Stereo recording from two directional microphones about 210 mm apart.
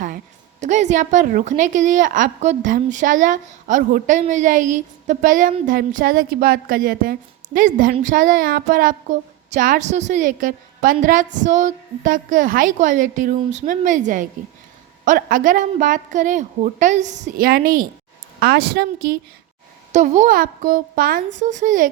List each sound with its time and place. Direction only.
0.6 s a woman's voice: 35° right (ahead or behind); by 18.9 s 50° right (ahead or behind)
19.9 s a woman's voice: 35° right (ahead or behind)